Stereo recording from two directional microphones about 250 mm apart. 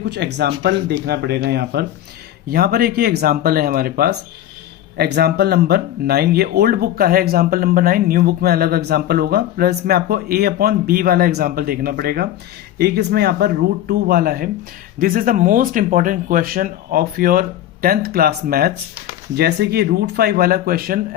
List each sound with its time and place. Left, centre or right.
0.0 s speech: right